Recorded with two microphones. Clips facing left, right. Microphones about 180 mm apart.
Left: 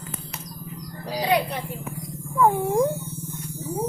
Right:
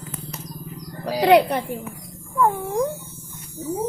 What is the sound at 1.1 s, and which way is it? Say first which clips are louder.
Music: right 8 dB; 70° right (ahead or behind).